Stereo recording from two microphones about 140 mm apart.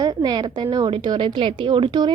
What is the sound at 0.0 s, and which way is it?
A woman's voice, 30° right (ahead or behind).